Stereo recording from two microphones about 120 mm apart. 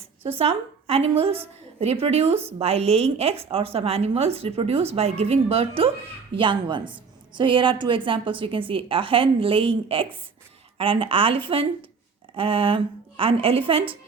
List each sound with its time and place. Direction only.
0.2 s a woman's voice: 50° right (ahead or behind)
6.3 s a woman's voice: 45° right (ahead or behind)